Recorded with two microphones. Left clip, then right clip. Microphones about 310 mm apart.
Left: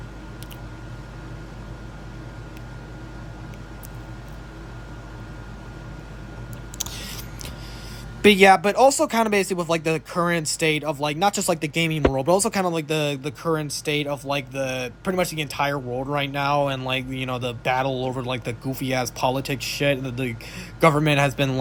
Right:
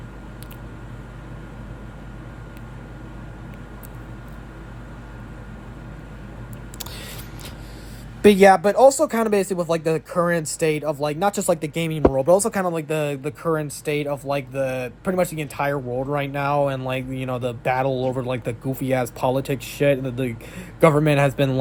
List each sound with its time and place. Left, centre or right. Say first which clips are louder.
8.2 s speech: right 1 dB; centre